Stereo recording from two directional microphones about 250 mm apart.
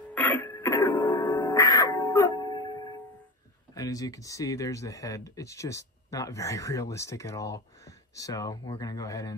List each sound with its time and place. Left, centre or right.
0.1 s throat clearing: centre
0.5 s music: centre
1.5 s music: centre
3.7 s speech: centre